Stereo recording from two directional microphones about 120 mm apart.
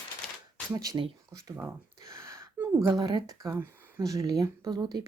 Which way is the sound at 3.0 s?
35° right (ahead or behind).